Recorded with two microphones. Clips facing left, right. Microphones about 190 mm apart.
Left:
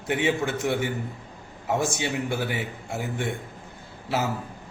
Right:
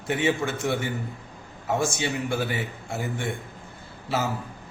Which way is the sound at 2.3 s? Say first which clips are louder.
Right 1 dB; 15° left (ahead or behind).